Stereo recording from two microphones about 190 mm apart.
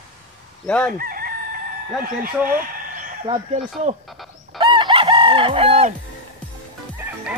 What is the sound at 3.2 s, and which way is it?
Speech, 30° right (ahead or behind).